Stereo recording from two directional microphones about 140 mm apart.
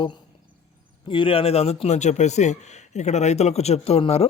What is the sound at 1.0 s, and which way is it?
Speech, 40° left (ahead or behind).